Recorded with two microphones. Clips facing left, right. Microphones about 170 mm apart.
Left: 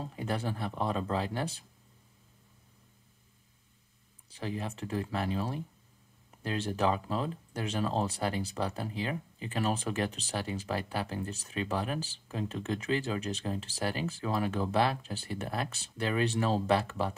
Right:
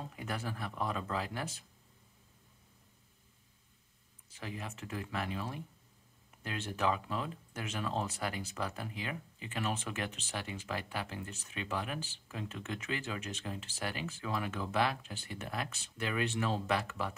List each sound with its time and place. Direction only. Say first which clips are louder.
0.0 s speech: left 6 dB; 30° left (ahead or behind)
4.3 s speech: left 7 dB; 30° left (ahead or behind)